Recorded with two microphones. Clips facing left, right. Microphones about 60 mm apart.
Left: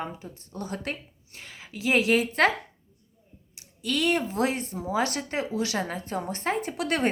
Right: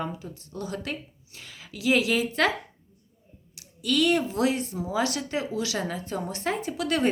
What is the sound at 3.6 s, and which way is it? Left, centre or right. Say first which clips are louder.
Speech: right 4 dB; left.